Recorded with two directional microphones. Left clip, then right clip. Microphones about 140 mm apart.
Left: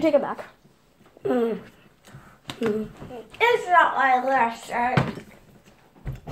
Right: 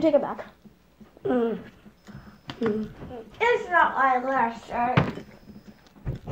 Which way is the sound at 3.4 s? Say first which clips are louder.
Left 3 dB; 30° right (ahead or behind).